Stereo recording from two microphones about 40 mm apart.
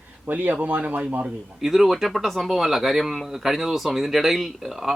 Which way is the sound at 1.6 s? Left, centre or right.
Centre.